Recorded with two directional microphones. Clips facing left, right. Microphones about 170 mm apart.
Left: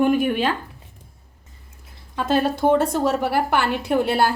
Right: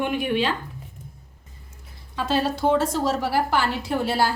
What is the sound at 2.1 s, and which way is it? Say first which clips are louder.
A woman's voice: left 3 dB; 55° left (ahead or behind).